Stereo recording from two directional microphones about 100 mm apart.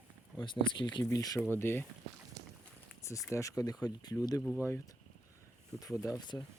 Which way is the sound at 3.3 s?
35° left (ahead or behind).